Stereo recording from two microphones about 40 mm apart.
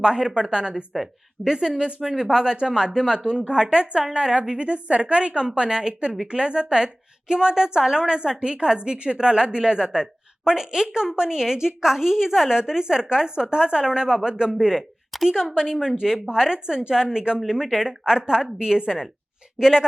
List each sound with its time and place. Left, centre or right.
0.2 s a woman's voice: centre
15.1 s speech: centre
15.5 s a woman's voice: centre
18.9 s speech: centre
19.5 s speech: centre